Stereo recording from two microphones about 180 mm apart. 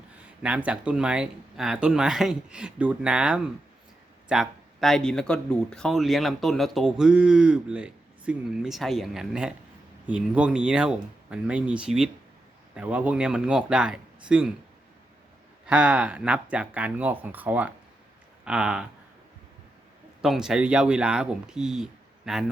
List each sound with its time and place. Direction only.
0.4 s speech: 5° right (ahead or behind)
15.6 s speech: 5° right (ahead or behind)
20.2 s speech: 5° right (ahead or behind)